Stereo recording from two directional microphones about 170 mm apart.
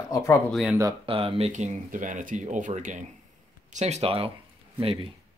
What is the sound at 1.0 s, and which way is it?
Speech, 35° right (ahead or behind).